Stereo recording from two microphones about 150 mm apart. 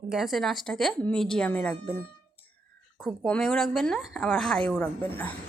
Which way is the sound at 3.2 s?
5° left (ahead or behind).